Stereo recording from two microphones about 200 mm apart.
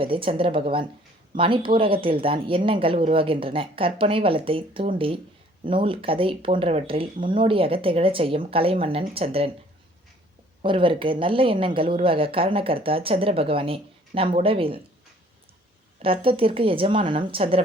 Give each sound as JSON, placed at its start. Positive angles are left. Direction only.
{"t": 0.0, "sound": "a woman's voice", "side_deg": -25}
{"t": 10.6, "sound": "a woman's voice", "side_deg": -25}
{"t": 16.0, "sound": "a woman's voice", "side_deg": -25}